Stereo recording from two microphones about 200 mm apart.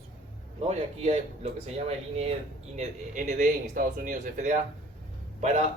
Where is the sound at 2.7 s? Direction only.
40° right (ahead or behind).